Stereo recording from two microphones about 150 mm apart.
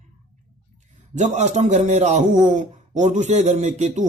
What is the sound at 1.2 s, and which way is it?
Speech, 50° right (ahead or behind).